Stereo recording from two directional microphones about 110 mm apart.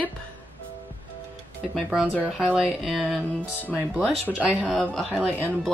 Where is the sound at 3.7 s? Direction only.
15° right (ahead or behind).